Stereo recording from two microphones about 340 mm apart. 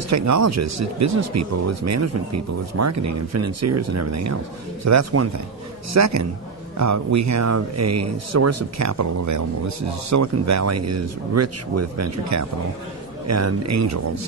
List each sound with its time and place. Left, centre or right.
0.1 s speech: right